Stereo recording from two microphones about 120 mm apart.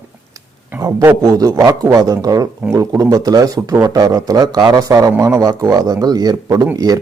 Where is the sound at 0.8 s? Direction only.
25° right (ahead or behind).